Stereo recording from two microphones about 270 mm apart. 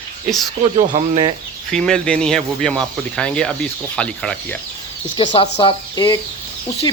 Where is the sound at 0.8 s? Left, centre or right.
Right.